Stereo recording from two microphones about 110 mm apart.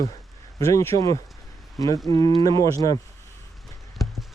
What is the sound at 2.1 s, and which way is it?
Speech, 50° right (ahead or behind).